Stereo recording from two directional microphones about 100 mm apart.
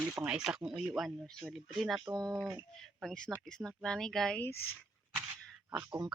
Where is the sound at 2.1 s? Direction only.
35° right (ahead or behind).